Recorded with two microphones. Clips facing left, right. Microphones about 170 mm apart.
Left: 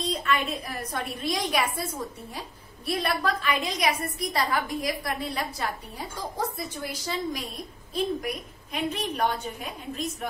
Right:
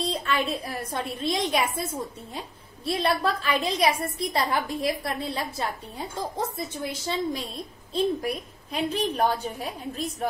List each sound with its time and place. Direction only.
0.0 s a woman's voice: 30° right (ahead or behind)
2.8 s a woman's voice: 25° right (ahead or behind)
6.9 s a woman's voice: 25° right (ahead or behind)